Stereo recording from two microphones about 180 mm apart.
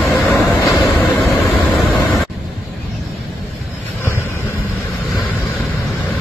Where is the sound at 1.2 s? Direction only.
Centre (ahead or behind).